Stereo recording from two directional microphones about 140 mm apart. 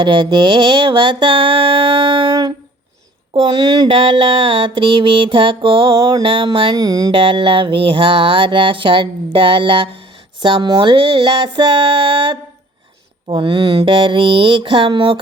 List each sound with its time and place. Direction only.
0.0 s mantra: 35° right (ahead or behind)
3.3 s mantra: 30° right (ahead or behind)
6.7 s music: 25° right (ahead or behind)
7.2 s mantra: 40° right (ahead or behind)